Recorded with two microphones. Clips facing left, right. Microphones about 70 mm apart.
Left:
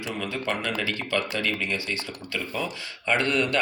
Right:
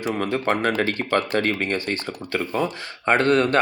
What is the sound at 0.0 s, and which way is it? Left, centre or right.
Speech, right.